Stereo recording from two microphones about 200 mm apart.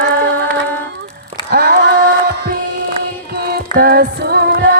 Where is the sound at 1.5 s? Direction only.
45° right (ahead or behind).